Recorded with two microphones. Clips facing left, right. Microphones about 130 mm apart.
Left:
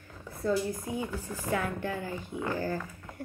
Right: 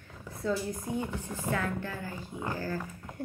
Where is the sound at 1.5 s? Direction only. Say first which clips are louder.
Left 3 dB; 15° left (ahead or behind).